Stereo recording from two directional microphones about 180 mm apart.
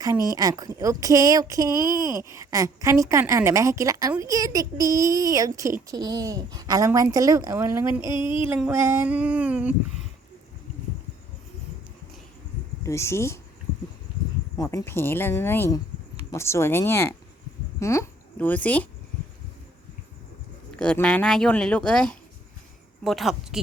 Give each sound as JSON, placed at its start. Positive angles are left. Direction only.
{"t": 0.0, "sound": "a woman's voice", "side_deg": -20}
{"t": 8.0, "sound": "a sound", "side_deg": 25}
{"t": 8.4, "sound": "a woman's voice", "side_deg": -10}
{"t": 12.8, "sound": "speech", "side_deg": 15}
{"t": 14.6, "sound": "a woman's voice", "side_deg": 20}
{"t": 20.7, "sound": "speech", "side_deg": 5}